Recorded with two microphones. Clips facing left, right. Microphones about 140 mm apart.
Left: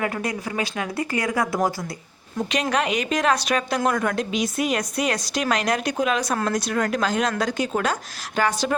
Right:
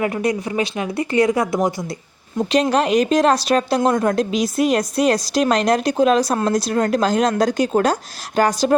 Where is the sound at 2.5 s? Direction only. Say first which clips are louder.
Right 7 dB; 35° right (ahead or behind).